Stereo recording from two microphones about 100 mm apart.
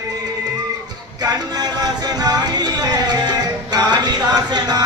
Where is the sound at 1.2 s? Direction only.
40° right (ahead or behind).